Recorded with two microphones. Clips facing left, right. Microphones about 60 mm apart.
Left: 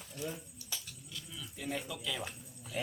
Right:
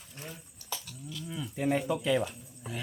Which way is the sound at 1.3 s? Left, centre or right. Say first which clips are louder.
Right 10 dB; right.